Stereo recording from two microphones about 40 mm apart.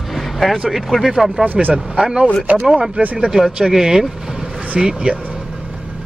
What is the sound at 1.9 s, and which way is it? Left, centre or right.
Speech, right.